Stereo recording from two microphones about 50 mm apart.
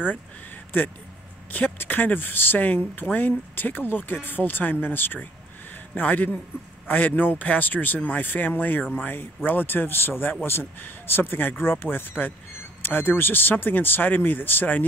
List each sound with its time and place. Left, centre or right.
1.8 s speech: left